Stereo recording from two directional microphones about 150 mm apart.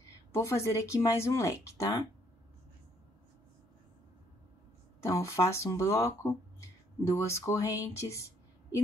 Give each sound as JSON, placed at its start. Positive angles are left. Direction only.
{"t": 0.3, "sound": "speech", "side_deg": 20}
{"t": 5.0, "sound": "speech", "side_deg": 20}